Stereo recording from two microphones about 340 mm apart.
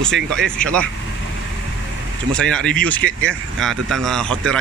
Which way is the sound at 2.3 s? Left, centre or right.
Centre.